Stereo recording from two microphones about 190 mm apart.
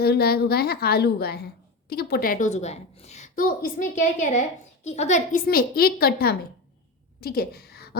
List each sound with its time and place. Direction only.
0.0 s a woman's voice: 55° left (ahead or behind); by 5.4 s 35° left (ahead or behind)
5.5 s a woman's voice: 55° left (ahead or behind)
7.2 s a sound: 55° left (ahead or behind)